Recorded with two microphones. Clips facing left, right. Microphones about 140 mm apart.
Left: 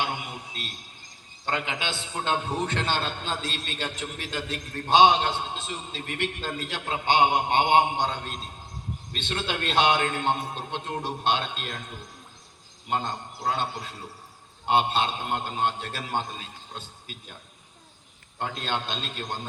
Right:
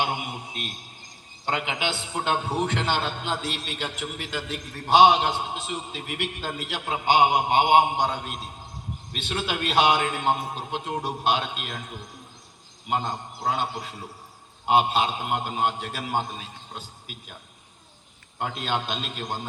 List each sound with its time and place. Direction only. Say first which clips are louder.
0.0 s a man's voice: right 3 dB; 20° right (ahead or behind)
18.3 s a man's voice: right 2 dB; 10° right (ahead or behind)